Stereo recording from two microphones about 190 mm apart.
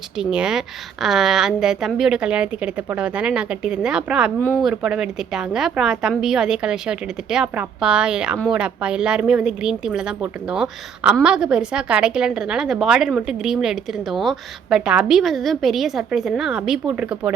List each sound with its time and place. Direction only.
0.2 s a woman's voice: 5° right (ahead or behind)
4.4 s speech: 10° left (ahead or behind)
4.7 s a woman's voice: 5° right (ahead or behind)